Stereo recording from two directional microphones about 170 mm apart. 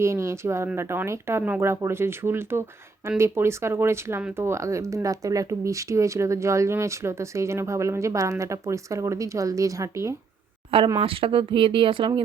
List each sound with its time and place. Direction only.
0.0 s speech: 15° right (ahead or behind)
10.7 s speech: 30° right (ahead or behind)